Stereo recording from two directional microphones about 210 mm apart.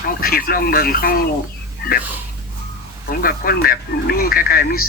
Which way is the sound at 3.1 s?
45° left (ahead or behind).